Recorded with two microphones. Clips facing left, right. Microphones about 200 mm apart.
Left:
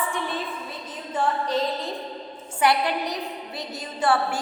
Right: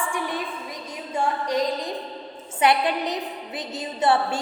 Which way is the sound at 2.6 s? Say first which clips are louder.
Right 1 dB; 20° right (ahead or behind).